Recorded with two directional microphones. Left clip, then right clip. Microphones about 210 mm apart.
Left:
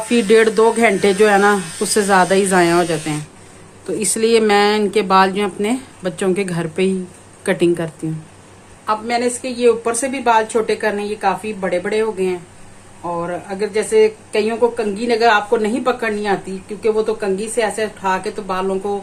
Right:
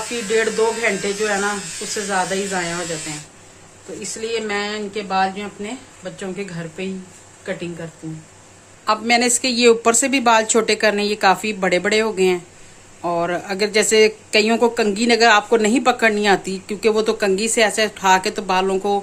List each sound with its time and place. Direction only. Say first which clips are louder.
0.3 s speech: left 6 dB; 55° left (ahead or behind)
4.0 s speech: left 10 dB; 55° left (ahead or behind)
8.9 s speech: right 1 dB; 35° right (ahead or behind)